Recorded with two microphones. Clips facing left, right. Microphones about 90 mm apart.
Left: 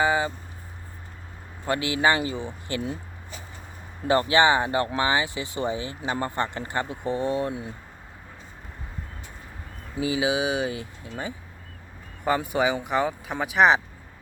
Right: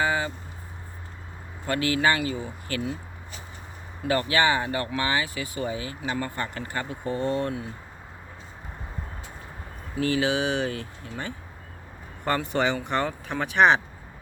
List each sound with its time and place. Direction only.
0.0 s vehicle: 20° left (ahead or behind)
1.6 s speech: 20° left (ahead or behind)
4.0 s speech: 25° left (ahead or behind)
10.0 s speech: 15° left (ahead or behind)